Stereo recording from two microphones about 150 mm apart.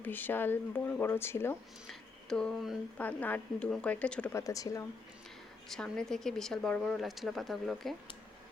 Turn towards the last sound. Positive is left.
turn(degrees=0)  # may be behind; listen again after turning